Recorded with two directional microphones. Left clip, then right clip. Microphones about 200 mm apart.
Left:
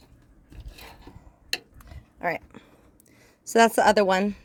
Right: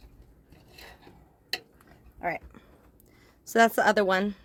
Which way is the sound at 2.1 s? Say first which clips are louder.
Left 3 dB; 50° left (ahead or behind).